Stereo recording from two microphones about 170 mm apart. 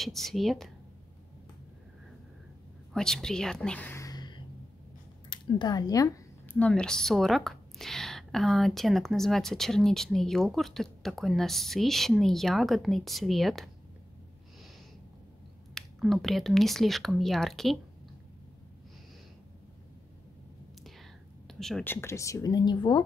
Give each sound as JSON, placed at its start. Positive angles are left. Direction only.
{"t": 0.0, "sound": "speech", "side_deg": 0}
{"t": 2.9, "sound": "a woman's voice", "side_deg": 5}
{"t": 15.7, "sound": "speech", "side_deg": 0}
{"t": 21.5, "sound": "speech", "side_deg": 0}